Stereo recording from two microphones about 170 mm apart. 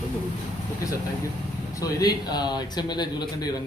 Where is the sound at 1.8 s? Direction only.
25° left (ahead or behind).